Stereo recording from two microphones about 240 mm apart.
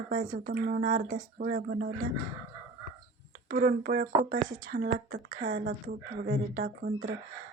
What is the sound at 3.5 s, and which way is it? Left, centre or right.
Speech, right.